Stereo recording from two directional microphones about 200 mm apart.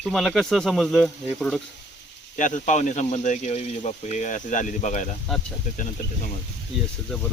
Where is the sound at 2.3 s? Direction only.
40° left (ahead or behind).